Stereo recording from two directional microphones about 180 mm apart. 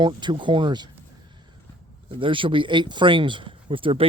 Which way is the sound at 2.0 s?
30° right (ahead or behind).